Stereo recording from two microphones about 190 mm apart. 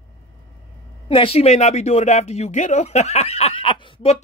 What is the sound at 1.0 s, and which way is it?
Speech, 30° left (ahead or behind).